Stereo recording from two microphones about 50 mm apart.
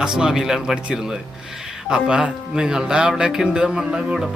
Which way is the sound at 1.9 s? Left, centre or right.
Centre.